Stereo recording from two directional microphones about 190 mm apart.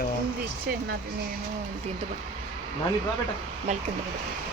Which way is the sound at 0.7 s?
50° right (ahead or behind).